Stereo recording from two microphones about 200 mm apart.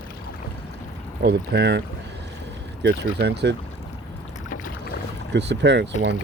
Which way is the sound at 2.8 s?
55° right (ahead or behind).